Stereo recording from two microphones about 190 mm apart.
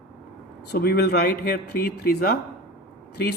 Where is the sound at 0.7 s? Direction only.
55° left (ahead or behind).